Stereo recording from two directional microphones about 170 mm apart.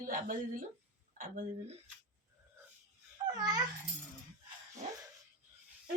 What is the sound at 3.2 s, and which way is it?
Babbling, 25° right (ahead or behind).